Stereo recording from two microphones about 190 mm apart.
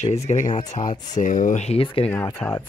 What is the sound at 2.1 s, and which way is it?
Speech, 10° left (ahead or behind).